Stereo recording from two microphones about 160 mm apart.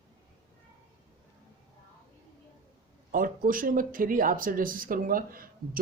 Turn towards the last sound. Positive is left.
turn(degrees=-65)  # may be behind; listen again after turning